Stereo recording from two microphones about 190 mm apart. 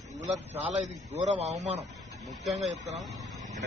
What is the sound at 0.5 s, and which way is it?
A man's voice, 35° right (ahead or behind).